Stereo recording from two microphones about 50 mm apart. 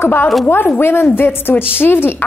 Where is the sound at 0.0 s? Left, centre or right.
Left.